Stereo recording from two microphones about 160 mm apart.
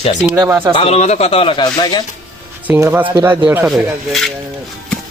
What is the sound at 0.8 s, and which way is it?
Speech, 40° left (ahead or behind).